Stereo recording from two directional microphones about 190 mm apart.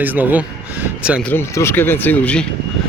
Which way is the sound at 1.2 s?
10° left (ahead or behind).